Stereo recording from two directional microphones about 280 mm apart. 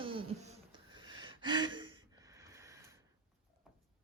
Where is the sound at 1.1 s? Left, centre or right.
Centre.